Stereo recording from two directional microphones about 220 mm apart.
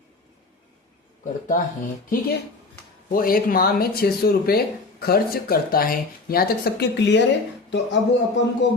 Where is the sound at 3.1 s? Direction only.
40° left (ahead or behind).